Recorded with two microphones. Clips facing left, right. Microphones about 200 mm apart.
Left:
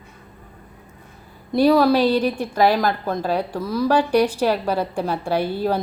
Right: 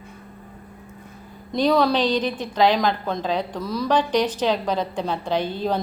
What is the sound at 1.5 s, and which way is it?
A woman's voice, 5° left (ahead or behind).